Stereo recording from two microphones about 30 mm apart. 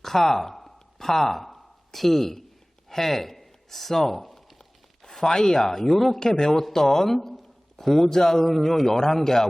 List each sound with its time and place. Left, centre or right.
0.0 s a sound: centre
2.9 s speech: centre
5.0 s a sound: centre
5.3 s a man's voice: centre
5.8 s speech: centre
6.1 s a man's voice: left
8.4 s a man's voice: centre